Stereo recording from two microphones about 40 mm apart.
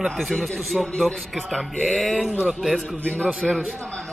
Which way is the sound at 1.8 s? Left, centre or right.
Centre.